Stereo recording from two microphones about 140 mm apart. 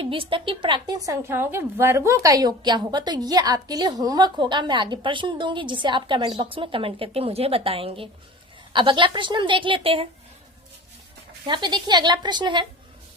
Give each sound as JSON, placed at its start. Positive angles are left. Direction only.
{"t": 0.0, "sound": "a woman's voice", "side_deg": -40}
{"t": 11.4, "sound": "a woman's voice", "side_deg": -35}